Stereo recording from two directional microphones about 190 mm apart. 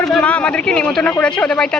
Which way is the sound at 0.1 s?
5° left (ahead or behind).